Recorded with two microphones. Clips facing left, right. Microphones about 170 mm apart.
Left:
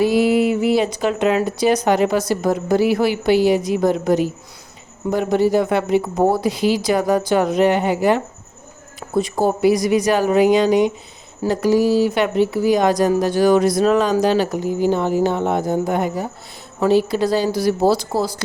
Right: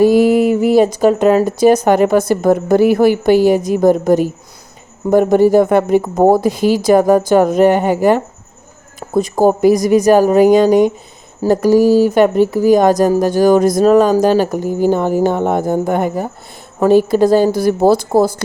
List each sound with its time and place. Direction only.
0.0 s speech: 45° right (ahead or behind)